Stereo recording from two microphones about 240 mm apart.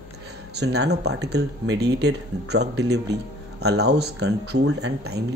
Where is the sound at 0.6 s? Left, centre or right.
Right.